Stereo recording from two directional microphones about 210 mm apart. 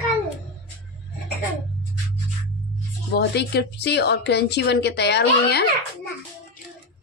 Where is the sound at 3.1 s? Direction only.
50° left (ahead or behind).